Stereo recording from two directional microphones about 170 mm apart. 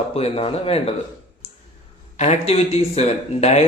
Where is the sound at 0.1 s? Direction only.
35° left (ahead or behind).